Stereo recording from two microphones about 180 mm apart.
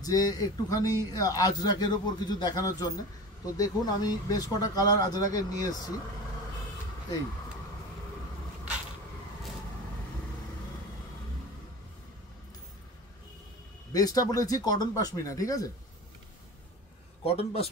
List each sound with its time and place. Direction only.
0.0 s speech: 20° left (ahead or behind)
13.9 s speech: 20° left (ahead or behind)
17.2 s speech: 35° left (ahead or behind)